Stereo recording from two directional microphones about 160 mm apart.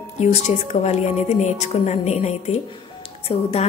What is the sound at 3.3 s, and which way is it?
Music, 40° left (ahead or behind).